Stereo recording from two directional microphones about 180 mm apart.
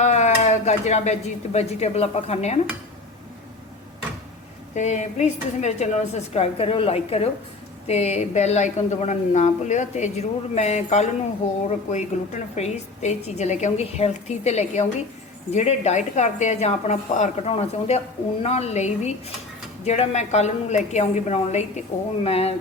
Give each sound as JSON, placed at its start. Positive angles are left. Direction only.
{"t": 0.0, "sound": "speech", "side_deg": 40}
{"t": 4.7, "sound": "a woman's voice", "side_deg": 40}